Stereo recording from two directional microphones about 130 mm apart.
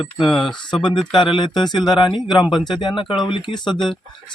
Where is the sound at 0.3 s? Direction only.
35° left (ahead or behind).